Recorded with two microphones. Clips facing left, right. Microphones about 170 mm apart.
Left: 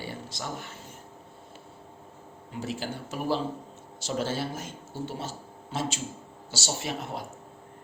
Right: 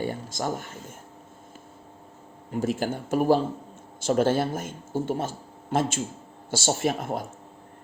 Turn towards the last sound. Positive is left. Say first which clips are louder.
# right 7 dB
turn(degrees=-50)  # may be behind; listen again after turning